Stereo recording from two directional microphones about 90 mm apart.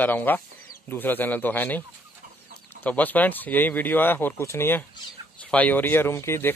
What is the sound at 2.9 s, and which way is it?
A man's voice, 20° left (ahead or behind).